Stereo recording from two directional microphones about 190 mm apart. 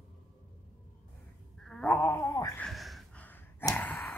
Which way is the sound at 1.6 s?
Centre (ahead or behind).